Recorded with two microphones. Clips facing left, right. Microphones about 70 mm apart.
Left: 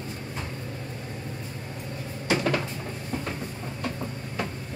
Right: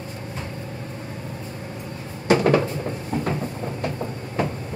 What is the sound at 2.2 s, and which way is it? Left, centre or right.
Cupboard open or close, right.